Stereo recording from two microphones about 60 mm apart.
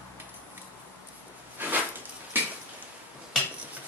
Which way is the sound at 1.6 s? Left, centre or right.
Right.